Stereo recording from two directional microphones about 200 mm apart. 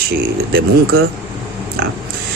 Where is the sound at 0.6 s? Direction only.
65° right (ahead or behind).